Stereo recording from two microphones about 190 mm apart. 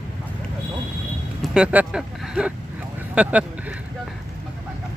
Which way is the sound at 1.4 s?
5° right (ahead or behind).